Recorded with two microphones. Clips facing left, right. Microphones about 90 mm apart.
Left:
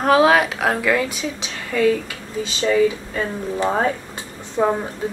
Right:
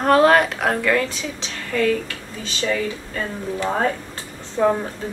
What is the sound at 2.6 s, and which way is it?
Speech, 25° left (ahead or behind).